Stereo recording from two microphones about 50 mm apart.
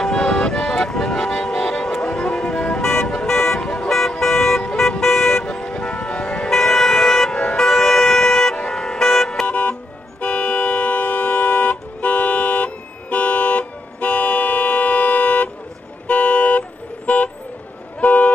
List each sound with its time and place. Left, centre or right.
0.0 s music: centre
4.7 s toot: centre; by 6.5 s left
6.5 s vehicle: centre
9.5 s music: left
16.1 s vehicle: left